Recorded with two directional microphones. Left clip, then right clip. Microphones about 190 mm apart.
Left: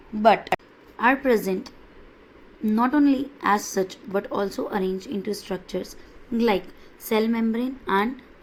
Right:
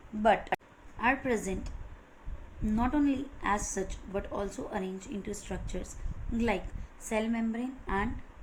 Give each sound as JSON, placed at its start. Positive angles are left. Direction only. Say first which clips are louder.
{"t": 0.2, "sound": "speech", "louder": "left 8 dB", "side_deg": 45}
{"t": 0.9, "sound": "a woman's voice", "louder": "left 9 dB", "side_deg": 30}
{"t": 2.7, "sound": "a woman's voice", "louder": "left 9 dB", "side_deg": 35}